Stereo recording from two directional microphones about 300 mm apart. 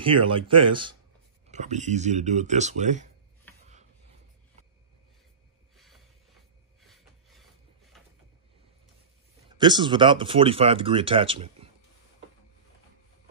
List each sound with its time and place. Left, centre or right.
0.0 s speech: centre
6.8 s a sound: centre
7.9 s vehicle: centre
9.6 s speech: centre